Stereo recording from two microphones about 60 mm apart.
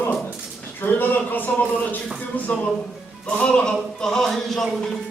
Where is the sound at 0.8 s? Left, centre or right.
Left.